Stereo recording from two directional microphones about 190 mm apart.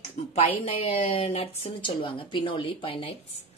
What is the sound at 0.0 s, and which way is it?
A woman's voice, 35° left (ahead or behind).